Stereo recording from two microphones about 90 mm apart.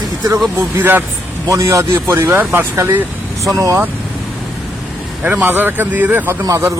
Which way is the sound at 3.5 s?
40° right (ahead or behind).